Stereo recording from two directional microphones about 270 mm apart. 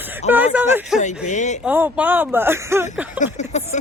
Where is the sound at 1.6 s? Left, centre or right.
Centre.